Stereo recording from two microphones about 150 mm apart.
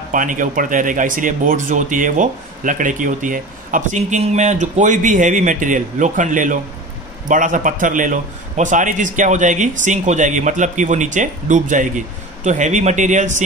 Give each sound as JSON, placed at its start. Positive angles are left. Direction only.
{"t": 0.1, "sound": "speech", "side_deg": -60}